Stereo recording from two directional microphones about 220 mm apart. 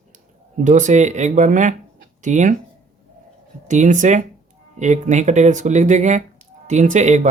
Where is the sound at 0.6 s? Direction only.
35° right (ahead or behind).